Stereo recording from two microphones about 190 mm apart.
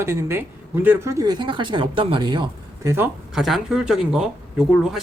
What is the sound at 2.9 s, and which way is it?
A man's voice, 10° right (ahead or behind).